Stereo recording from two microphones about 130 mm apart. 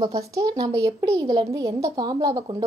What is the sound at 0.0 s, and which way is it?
A woman's voice, 25° right (ahead or behind).